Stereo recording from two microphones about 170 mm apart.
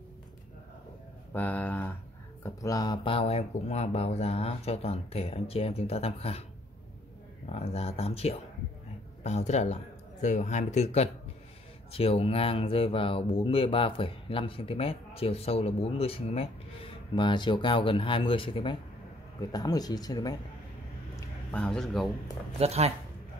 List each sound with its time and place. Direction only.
1.3 s speech: 10° left (ahead or behind)
2.4 s speech: 20° left (ahead or behind); by 6.4 s 35° left (ahead or behind)
7.5 s speech: 35° left (ahead or behind)
21.5 s speech: 5° left (ahead or behind)
22.6 s speech: 40° right (ahead or behind)